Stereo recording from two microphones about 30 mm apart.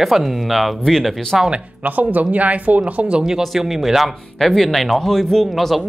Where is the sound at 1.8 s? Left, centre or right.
Right.